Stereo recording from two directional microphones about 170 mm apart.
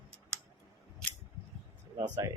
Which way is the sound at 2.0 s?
20° right (ahead or behind).